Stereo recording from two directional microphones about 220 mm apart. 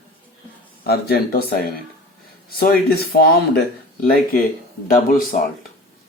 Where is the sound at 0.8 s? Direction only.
45° left (ahead or behind).